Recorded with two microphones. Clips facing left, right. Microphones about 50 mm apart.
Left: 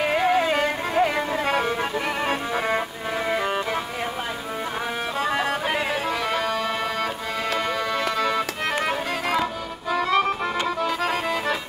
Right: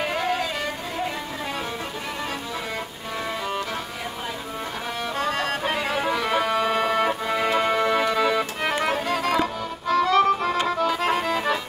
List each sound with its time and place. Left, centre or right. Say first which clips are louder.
0.0 s music: left 4 dB; centre
0.4 s music: left 6 dB; left
3.3 s music: left 4 dB; left
5.2 s music: left 1 dB; centre
5.9 s music: right 2 dB; centre